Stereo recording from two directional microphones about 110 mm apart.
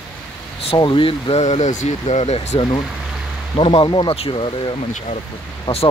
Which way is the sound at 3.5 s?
50° left (ahead or behind).